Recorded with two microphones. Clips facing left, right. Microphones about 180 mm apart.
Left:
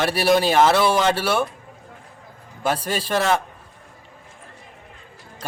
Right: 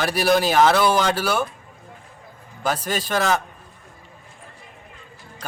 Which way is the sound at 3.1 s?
Centre (ahead or behind).